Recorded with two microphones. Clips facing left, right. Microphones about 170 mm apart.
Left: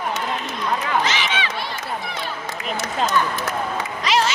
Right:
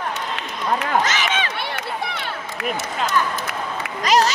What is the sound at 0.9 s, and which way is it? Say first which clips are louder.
Run: right 1 dB; 45° right (ahead or behind).